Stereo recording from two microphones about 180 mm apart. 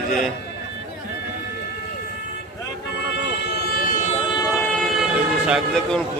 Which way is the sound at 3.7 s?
55° left (ahead or behind).